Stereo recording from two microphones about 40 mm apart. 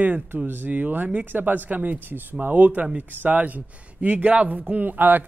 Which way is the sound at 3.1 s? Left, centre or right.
Right.